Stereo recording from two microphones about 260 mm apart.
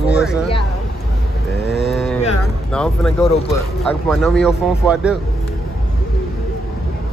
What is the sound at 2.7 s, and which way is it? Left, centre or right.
Speech, centre.